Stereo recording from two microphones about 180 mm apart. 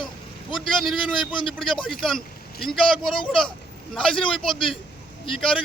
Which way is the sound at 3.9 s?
Centre (ahead or behind).